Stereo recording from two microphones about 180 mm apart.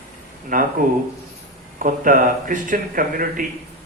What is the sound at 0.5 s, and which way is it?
Speech, 50° right (ahead or behind).